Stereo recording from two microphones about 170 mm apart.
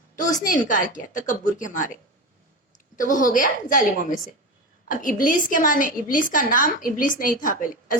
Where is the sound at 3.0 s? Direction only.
50° left (ahead or behind).